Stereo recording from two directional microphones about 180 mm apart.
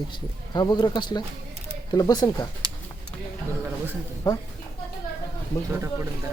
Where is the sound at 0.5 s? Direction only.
25° left (ahead or behind).